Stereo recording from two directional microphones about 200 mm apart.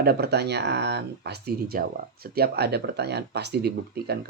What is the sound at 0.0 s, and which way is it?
Speech, 50° right (ahead or behind).